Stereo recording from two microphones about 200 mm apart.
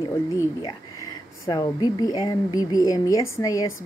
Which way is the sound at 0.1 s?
15° left (ahead or behind).